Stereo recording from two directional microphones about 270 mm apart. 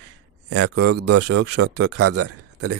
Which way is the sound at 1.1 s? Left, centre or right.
Right.